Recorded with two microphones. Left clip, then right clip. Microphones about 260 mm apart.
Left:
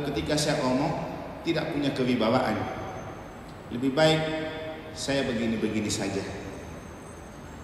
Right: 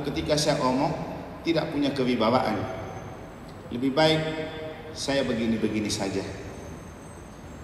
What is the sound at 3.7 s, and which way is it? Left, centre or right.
A man's voice, right.